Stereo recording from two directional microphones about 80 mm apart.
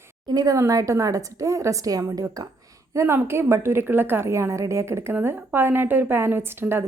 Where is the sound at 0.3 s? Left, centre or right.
Right.